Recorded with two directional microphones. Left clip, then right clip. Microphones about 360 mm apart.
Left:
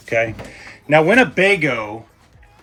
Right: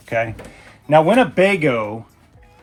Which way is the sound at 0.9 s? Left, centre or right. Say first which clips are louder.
Even; right.